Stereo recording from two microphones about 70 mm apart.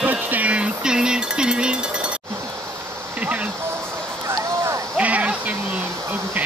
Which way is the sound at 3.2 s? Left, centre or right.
Right.